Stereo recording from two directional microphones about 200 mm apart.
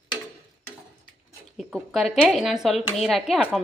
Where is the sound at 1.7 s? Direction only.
Centre (ahead or behind).